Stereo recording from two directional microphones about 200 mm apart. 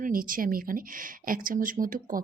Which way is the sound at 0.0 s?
45° right (ahead or behind).